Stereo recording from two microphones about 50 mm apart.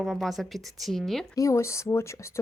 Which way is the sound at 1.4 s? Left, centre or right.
Left.